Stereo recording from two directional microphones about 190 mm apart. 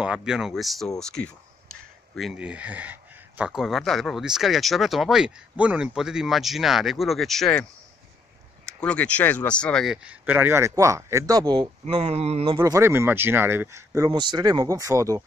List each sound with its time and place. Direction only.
0.0 s speech: 5° right (ahead or behind)
8.6 s speech: 5° left (ahead or behind); by 15.2 s 15° right (ahead or behind)